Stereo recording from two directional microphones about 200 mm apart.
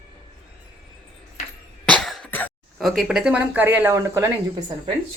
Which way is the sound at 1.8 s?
5° left (ahead or behind).